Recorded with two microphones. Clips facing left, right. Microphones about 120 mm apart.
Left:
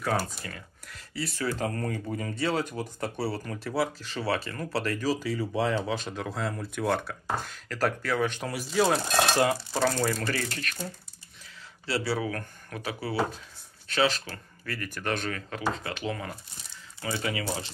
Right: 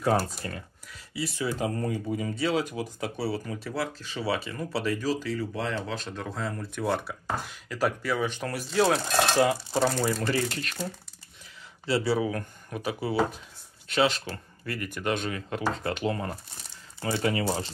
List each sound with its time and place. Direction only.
0.4 s speech: 30° right (ahead or behind)
1.1 s speech: 15° right (ahead or behind)
8.4 s speech: 5° left (ahead or behind)
9.8 s speech: 10° right (ahead or behind)
11.8 s speech: 20° right (ahead or behind)
15.8 s speech: 35° right (ahead or behind)